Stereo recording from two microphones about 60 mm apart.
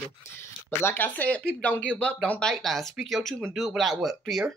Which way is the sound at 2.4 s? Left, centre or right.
Centre.